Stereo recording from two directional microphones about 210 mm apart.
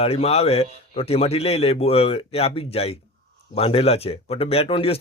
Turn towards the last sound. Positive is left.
turn(degrees=25)  # may be behind; listen again after turning